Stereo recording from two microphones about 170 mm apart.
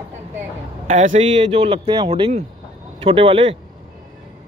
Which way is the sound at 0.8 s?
45° right (ahead or behind).